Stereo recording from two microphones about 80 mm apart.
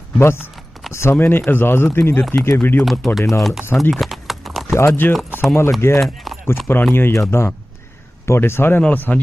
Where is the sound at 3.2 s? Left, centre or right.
Left.